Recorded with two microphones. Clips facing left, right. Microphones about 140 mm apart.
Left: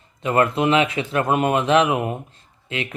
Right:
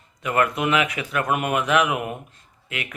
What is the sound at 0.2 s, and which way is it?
Speech, 30° left (ahead or behind).